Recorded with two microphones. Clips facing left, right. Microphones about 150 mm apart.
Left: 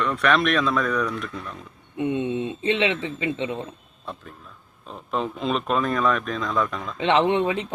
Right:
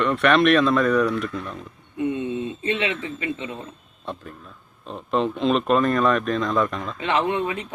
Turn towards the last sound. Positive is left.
turn(degrees=25)  # may be behind; listen again after turning